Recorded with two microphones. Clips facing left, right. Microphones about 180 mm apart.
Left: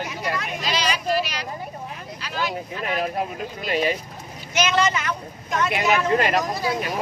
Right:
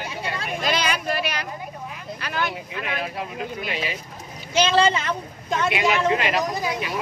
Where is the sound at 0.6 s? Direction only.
55° right (ahead or behind).